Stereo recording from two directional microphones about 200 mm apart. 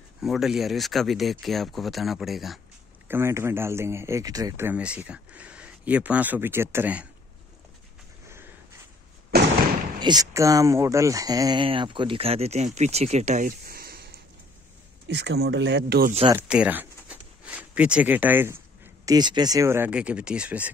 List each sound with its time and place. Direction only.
0.2 s speech: centre (ahead or behind)
3.1 s speech: 15° right (ahead or behind)
9.3 s fireworks: 55° right (ahead or behind)
9.9 s speech: 20° right (ahead or behind); by 16.1 s 55° right (ahead or behind)
16.3 s speech: 5° right (ahead or behind)
19.0 s speech: 20° right (ahead or behind)